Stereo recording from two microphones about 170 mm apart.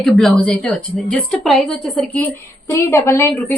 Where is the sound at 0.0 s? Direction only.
Centre (ahead or behind).